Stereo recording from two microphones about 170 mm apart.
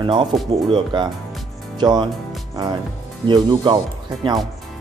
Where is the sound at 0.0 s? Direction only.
30° right (ahead or behind).